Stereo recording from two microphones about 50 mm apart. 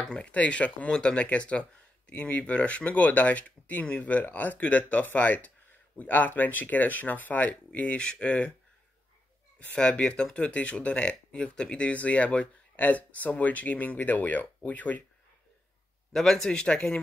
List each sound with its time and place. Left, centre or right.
0.0 s speech: left
9.6 s speech: left
16.1 s speech: centre